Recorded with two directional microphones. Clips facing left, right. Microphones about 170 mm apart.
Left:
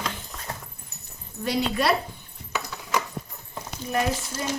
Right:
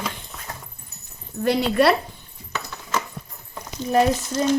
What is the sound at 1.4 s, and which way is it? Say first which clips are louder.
Speech: right 6 dB; 60° right (ahead or behind).